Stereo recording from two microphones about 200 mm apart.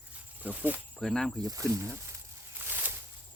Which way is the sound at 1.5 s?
15° right (ahead or behind).